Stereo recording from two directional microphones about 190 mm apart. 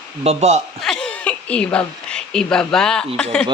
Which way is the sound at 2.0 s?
5° left (ahead or behind).